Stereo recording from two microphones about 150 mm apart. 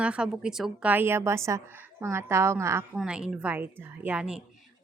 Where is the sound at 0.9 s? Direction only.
15° right (ahead or behind).